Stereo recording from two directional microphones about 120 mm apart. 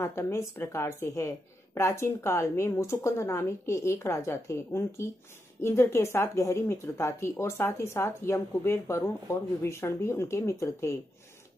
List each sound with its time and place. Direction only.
0.0 s speech: 25° left (ahead or behind)